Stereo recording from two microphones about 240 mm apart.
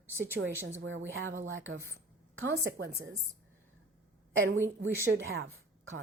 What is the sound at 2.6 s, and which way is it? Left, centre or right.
Speech, right.